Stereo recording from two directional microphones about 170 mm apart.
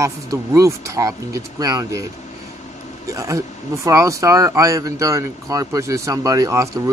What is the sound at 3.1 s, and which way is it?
Speech, 20° right (ahead or behind).